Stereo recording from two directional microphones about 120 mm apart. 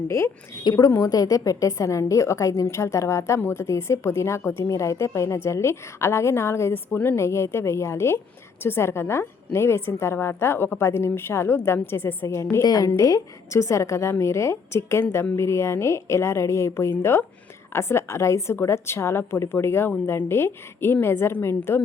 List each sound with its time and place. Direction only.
0.1 s a woman's voice: 20° left (ahead or behind)